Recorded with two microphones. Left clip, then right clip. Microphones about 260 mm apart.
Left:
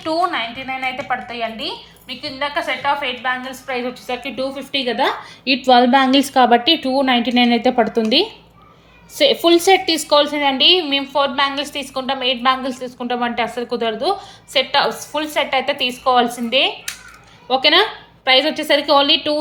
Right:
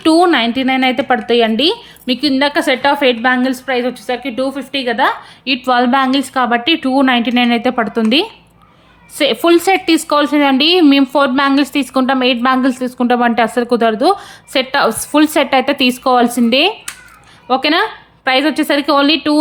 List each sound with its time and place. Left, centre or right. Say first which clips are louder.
1.3 s a woman's voice: right 12 dB; right